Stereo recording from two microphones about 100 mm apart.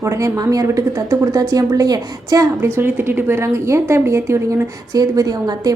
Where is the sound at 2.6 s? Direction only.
25° right (ahead or behind).